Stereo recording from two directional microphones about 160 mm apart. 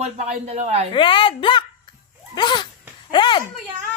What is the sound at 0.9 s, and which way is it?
Speech, 30° left (ahead or behind).